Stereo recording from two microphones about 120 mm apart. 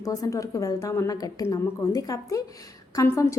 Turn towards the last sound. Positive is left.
turn(degrees=25)  # may be behind; listen again after turning